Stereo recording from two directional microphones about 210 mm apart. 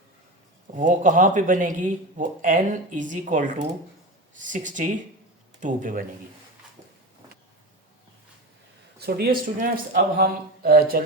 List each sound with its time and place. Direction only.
0.7 s speech: 40° right (ahead or behind)
9.0 s speech: 45° right (ahead or behind)